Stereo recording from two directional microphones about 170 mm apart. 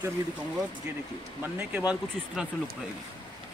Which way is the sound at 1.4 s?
10° right (ahead or behind).